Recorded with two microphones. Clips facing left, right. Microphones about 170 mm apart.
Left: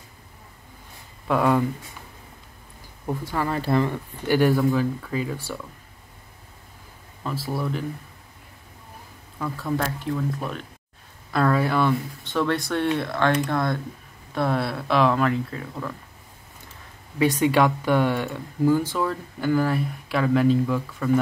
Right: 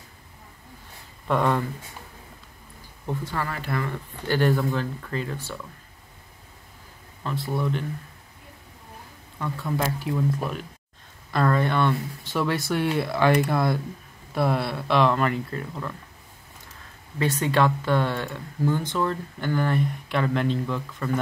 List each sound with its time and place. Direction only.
1.2 s speech: 5° left (ahead or behind)
3.1 s speech: 10° left (ahead or behind)
3.4 s speech: 25° left (ahead or behind)
3.9 s speech: 10° left (ahead or behind)
7.2 s speech: 5° left (ahead or behind)
9.4 s speech: centre (ahead or behind)
17.2 s speech: 15° left (ahead or behind)